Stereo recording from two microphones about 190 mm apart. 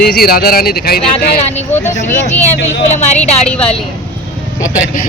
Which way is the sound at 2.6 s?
35° left (ahead or behind).